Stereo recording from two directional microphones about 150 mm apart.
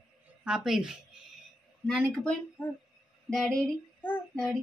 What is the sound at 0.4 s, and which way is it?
A woman's voice, 5° right (ahead or behind).